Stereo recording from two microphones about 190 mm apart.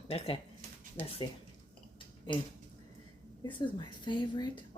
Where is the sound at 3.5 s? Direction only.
25° left (ahead or behind).